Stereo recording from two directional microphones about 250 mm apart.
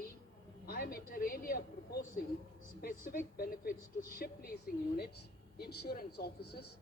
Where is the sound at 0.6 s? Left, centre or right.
Left.